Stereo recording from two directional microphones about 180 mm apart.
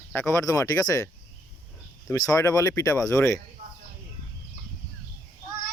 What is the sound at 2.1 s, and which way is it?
Speech, 20° left (ahead or behind).